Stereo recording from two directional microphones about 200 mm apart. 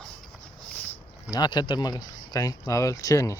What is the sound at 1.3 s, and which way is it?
Speech, 20° left (ahead or behind).